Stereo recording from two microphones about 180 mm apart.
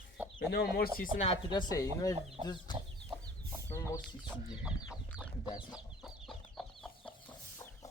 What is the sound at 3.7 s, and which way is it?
Chicken, 15° left (ahead or behind).